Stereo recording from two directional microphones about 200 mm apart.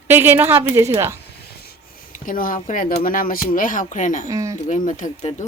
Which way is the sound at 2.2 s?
45° left (ahead or behind).